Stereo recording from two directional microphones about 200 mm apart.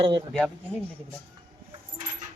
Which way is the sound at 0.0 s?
25° right (ahead or behind).